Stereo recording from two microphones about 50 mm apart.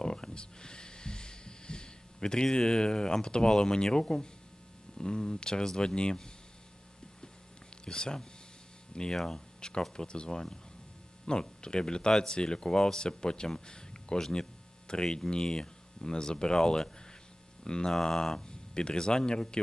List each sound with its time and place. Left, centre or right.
0.0 s a sound: centre
4.9 s speech: centre
7.9 s speech: centre